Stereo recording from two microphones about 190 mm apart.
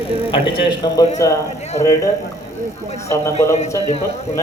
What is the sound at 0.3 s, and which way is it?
Speech, 25° left (ahead or behind).